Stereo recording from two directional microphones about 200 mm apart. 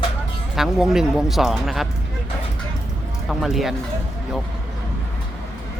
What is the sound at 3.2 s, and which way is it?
Speech, centre (ahead or behind).